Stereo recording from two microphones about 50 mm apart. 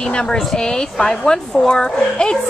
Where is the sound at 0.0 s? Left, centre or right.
Centre.